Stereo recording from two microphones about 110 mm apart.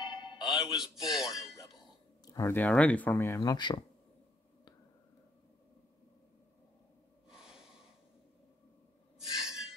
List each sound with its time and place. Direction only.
0.0 s music: 40° left (ahead or behind)
1.1 s speech: 5° right (ahead or behind)
2.2 s a sound: 30° left (ahead or behind)
2.5 s speech: 15° left (ahead or behind)
3.3 s speech: 40° left (ahead or behind)
7.2 s snort: 5° right (ahead or behind)
9.3 s a sound: 5° right (ahead or behind)